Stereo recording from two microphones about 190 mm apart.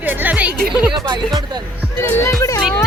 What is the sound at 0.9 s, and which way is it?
Speech, 20° right (ahead or behind).